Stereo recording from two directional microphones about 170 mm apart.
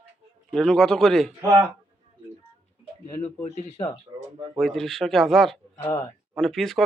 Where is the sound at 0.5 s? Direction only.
5° left (ahead or behind).